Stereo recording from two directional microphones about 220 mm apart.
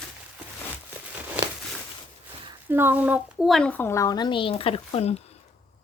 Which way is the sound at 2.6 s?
10° right (ahead or behind).